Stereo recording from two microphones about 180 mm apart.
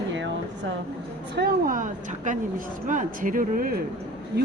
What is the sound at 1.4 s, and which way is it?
Speech, 55° right (ahead or behind).